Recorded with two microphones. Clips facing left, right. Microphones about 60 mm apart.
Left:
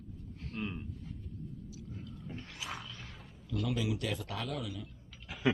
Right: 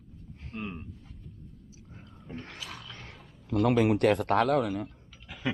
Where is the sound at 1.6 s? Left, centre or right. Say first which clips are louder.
Left 5 dB; right.